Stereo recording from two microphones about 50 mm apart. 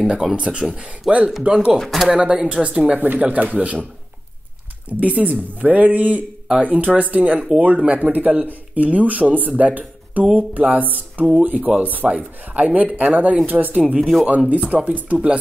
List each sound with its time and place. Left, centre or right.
0.0 s speech: centre
1.8 s speech: centre
2.1 s speech: right
2.9 s a woman's voice: right
5.0 s a woman's voice: right